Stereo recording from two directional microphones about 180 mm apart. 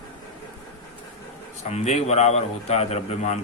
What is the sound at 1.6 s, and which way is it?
A man's voice, 40° left (ahead or behind).